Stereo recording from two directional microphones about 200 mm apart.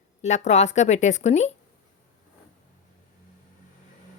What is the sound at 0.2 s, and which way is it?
A woman's voice, 35° left (ahead or behind).